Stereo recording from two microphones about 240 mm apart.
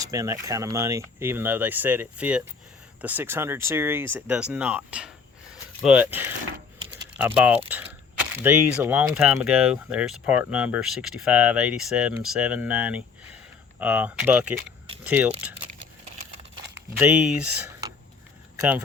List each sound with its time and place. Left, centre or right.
0.0 s speech: centre
17.0 s speech: centre